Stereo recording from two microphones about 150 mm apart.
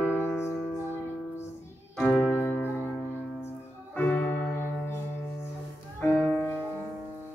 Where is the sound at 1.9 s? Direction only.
10° left (ahead or behind).